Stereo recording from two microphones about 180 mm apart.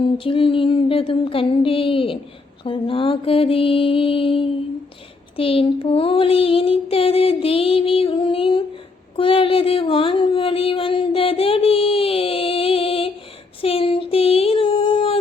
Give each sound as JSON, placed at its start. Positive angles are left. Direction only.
{"t": 0.0, "sound": "music", "side_deg": 30}
{"t": 5.4, "sound": "child singing", "side_deg": 30}
{"t": 9.1, "sound": "a sound", "side_deg": 30}